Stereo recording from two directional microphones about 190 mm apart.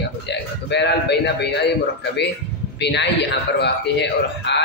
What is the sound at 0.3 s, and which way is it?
A man's voice, 65° left (ahead or behind).